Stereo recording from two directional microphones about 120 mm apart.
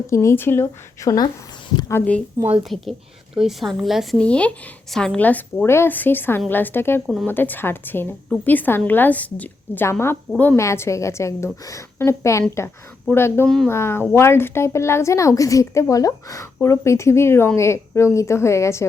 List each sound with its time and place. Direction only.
0.1 s a woman's voice: 25° left (ahead or behind)
1.9 s a woman's voice: 15° left (ahead or behind)
2.7 s a woman's voice: 5° left (ahead or behind)
4.2 s a woman's voice: 10° left (ahead or behind)